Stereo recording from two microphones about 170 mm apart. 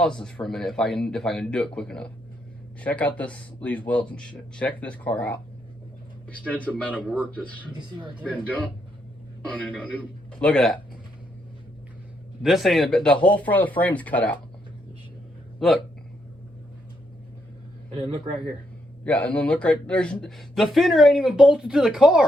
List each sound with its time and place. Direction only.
0.0 s speech: 5° left (ahead or behind)
12.4 s speech: centre (ahead or behind)
15.5 s a man's voice: centre (ahead or behind)
17.9 s a man's voice: 30° right (ahead or behind)
19.0 s speech: 10° left (ahead or behind)